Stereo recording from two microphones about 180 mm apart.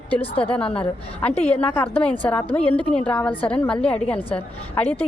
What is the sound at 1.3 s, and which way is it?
Speech, 35° left (ahead or behind).